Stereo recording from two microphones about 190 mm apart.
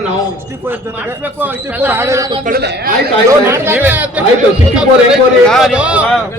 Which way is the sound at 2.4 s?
55° right (ahead or behind).